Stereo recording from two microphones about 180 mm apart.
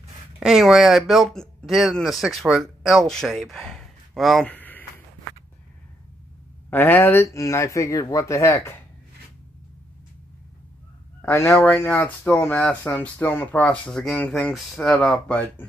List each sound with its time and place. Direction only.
0.4 s speech: 5° right (ahead or behind)
6.7 s speech: 10° left (ahead or behind)
11.1 s speech: 15° left (ahead or behind)